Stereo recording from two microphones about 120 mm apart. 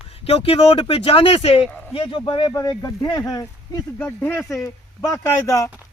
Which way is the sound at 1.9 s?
45° left (ahead or behind).